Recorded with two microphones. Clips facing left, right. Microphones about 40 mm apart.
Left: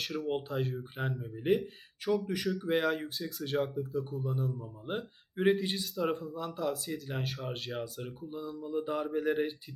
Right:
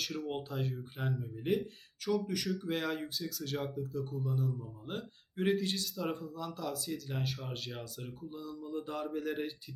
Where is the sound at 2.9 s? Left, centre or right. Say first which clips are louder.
Left 4 dB; centre.